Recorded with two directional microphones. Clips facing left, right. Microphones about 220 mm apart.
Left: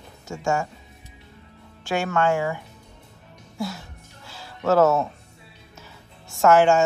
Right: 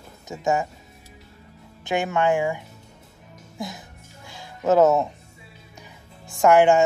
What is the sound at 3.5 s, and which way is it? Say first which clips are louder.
Music: left 3 dB; 15° right (ahead or behind).